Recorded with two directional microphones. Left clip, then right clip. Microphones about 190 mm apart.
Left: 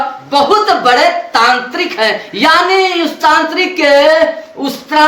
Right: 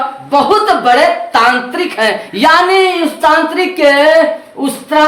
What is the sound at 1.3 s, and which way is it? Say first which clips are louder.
Speech: even; 30° right (ahead or behind).